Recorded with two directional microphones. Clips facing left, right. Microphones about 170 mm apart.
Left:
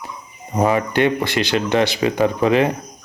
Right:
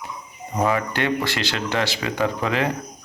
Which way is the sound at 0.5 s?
20° left (ahead or behind).